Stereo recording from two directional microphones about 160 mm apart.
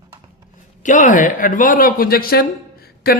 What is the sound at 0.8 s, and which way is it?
Speech, 50° left (ahead or behind).